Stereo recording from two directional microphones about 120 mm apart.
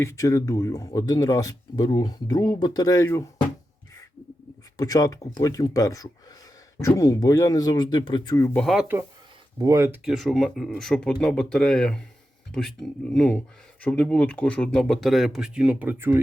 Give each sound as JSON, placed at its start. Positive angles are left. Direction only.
{"t": 0.0, "sound": "speech", "side_deg": 25}
{"t": 4.8, "sound": "speech", "side_deg": 30}
{"t": 8.5, "sound": "speech", "side_deg": 0}
{"t": 9.6, "sound": "speech", "side_deg": -25}
{"t": 10.0, "sound": "speech", "side_deg": -5}